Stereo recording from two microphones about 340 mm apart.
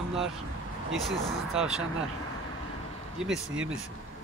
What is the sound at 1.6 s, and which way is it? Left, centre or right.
Speech, centre.